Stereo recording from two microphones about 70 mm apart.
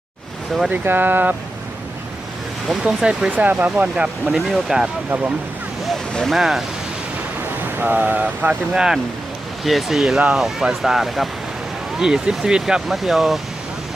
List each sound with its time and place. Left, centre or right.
0.7 s speech: right
2.8 s speech: centre
3.3 s speech: right
4.3 s speech: centre
5.9 s speech: centre
7.8 s speech: right
8.7 s speech: centre
10.2 s speech: centre